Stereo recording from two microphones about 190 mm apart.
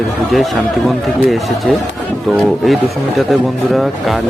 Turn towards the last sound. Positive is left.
turn(degrees=0)  # may be behind; listen again after turning